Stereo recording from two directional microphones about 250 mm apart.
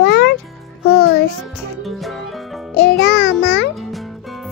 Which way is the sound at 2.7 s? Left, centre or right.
Left.